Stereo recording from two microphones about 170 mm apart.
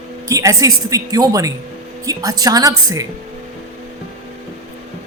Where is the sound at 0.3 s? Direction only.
20° right (ahead or behind).